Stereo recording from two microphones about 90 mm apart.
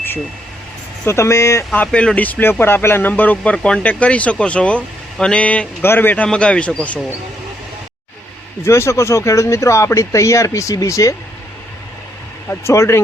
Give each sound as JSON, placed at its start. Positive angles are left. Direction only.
{"t": 1.0, "sound": "speech", "side_deg": 30}
{"t": 1.7, "sound": "speech", "side_deg": 15}
{"t": 6.2, "sound": "speech", "side_deg": 10}
{"t": 8.6, "sound": "speech", "side_deg": 30}
{"t": 12.5, "sound": "speech", "side_deg": 30}